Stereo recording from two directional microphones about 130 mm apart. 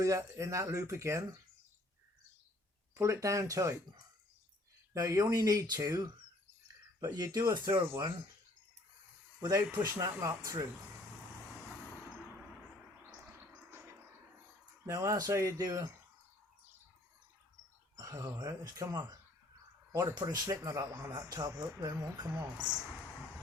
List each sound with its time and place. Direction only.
0.0 s speech: 20° right (ahead or behind)
2.9 s speech: 25° right (ahead or behind)
4.9 s speech: 25° right (ahead or behind)
7.1 s speech: 30° right (ahead or behind)
9.4 s speech: 25° right (ahead or behind)
13.7 s a sound: 15° right (ahead or behind)
14.8 s speech: 25° right (ahead or behind)
17.9 s speech: 25° right (ahead or behind)